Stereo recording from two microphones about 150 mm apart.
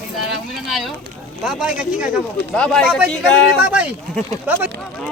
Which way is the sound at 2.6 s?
5° left (ahead or behind).